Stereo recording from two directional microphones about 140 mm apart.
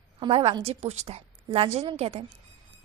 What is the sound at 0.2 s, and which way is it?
A woman's voice, 40° right (ahead or behind).